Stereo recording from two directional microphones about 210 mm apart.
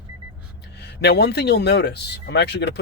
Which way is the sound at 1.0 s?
50° left (ahead or behind).